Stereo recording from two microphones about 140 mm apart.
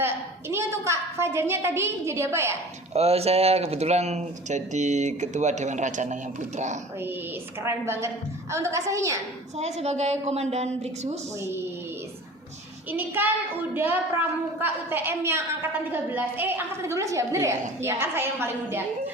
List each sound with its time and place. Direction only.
0.0 s a woman's voice: 15° right (ahead or behind)
2.9 s speech: 45° right (ahead or behind)
7.6 s a woman's voice: 20° right (ahead or behind)
9.6 s a woman's voice: 50° right (ahead or behind)
12.9 s a woman's voice: 15° right (ahead or behind)